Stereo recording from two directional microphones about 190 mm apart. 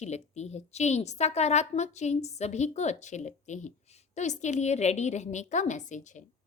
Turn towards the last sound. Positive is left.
turn(degrees=40)  # may be behind; listen again after turning